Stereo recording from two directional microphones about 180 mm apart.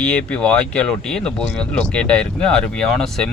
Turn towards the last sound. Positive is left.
turn(degrees=5)  # may be behind; listen again after turning